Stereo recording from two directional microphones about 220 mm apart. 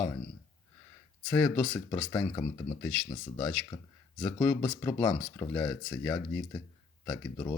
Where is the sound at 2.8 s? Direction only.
5° left (ahead or behind).